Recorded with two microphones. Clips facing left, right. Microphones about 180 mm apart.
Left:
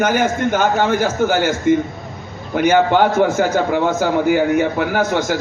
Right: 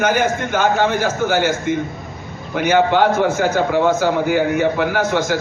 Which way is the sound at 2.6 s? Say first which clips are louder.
Left 1 dB; 45° left (ahead or behind).